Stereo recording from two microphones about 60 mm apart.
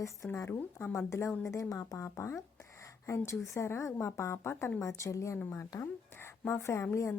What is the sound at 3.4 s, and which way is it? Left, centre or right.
A woman's voice, left.